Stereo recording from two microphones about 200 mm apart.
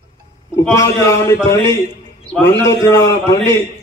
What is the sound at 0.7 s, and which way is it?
A man's voice, 15° left (ahead or behind).